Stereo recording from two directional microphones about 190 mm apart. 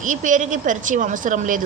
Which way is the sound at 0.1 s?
40° right (ahead or behind).